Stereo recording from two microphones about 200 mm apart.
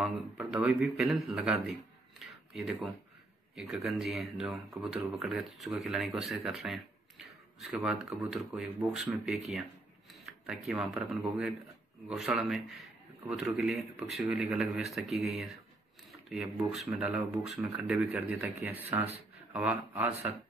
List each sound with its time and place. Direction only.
0.0 s speech: 5° right (ahead or behind)
2.1 s a sound: centre (ahead or behind)
3.5 s speech: centre (ahead or behind)
18.9 s speech: 30° right (ahead or behind)
19.5 s speech: 10° right (ahead or behind)